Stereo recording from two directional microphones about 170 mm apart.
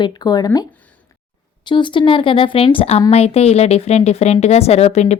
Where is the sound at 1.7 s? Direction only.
30° left (ahead or behind).